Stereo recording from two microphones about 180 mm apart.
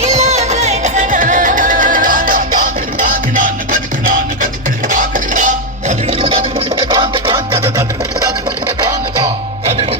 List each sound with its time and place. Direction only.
0.0 s music: 35° right (ahead or behind)
5.9 s music: 35° right (ahead or behind)